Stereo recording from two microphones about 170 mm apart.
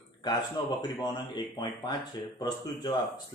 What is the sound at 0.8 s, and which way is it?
Speech, 25° left (ahead or behind).